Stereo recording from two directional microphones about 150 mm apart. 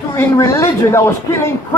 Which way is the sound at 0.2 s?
20° left (ahead or behind).